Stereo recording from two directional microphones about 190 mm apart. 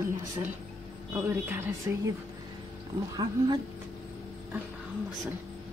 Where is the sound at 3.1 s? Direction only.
25° right (ahead or behind).